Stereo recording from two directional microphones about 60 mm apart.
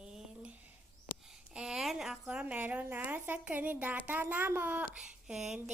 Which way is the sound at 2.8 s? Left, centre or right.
Right.